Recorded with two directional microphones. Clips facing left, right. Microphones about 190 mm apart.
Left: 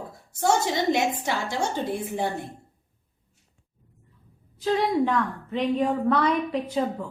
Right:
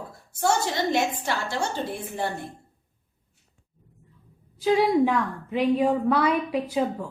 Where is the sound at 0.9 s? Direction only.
20° left (ahead or behind).